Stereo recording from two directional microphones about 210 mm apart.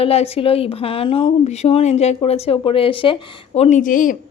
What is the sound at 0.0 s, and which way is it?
Speech, 30° left (ahead or behind).